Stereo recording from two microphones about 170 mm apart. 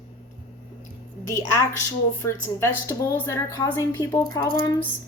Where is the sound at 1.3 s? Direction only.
20° left (ahead or behind).